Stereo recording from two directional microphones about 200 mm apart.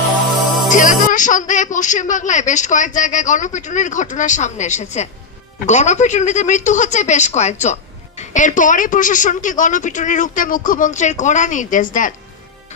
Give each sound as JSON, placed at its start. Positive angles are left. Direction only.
{"t": 0.3, "sound": "music", "side_deg": 0}
{"t": 0.7, "sound": "speech", "side_deg": 40}